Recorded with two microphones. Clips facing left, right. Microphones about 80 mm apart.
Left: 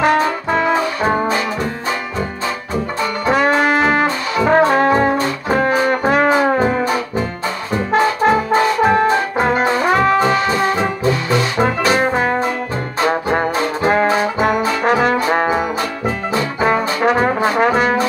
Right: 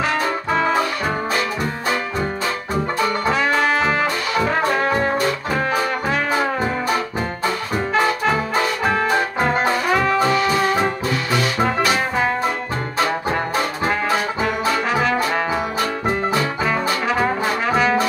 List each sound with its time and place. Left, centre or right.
3.3 s brass instrument: left
6.2 s music: left
7.9 s brass instrument: left
11.8 s music: left
13.8 s trombone: left
15.1 s trombone: left
16.6 s trombone: left